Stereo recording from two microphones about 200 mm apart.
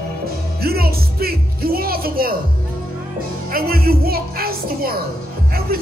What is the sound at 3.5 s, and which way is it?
Speech, 50° right (ahead or behind).